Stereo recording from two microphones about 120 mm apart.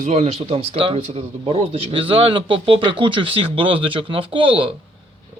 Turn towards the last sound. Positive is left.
turn(degrees=-45)  # may be behind; listen again after turning